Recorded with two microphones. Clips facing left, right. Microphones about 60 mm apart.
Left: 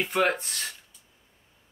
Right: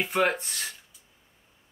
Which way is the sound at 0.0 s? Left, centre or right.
Centre.